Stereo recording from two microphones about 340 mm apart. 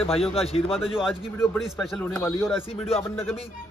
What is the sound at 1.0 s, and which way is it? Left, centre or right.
A man's voice, centre.